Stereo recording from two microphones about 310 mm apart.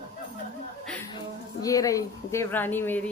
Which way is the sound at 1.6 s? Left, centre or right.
Centre.